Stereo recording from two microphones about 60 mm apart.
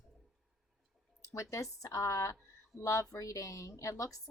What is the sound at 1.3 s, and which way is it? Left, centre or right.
A woman's voice, left.